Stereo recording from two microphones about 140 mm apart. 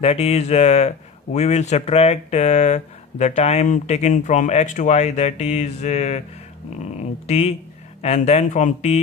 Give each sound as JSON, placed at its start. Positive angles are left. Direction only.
{"t": 0.0, "sound": "speech", "side_deg": 50}